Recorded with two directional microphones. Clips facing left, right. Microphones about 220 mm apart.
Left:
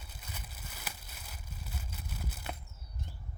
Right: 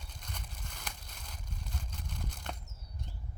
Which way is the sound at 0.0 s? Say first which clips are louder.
Right 1 dB; 5° left (ahead or behind).